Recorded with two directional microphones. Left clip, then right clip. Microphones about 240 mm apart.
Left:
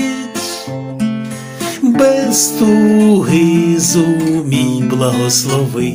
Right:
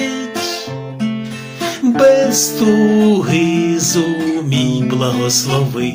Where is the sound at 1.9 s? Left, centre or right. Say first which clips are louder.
Right 2 dB; left.